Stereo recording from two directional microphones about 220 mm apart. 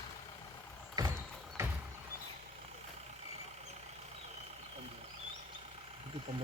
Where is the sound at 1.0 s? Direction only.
15° right (ahead or behind).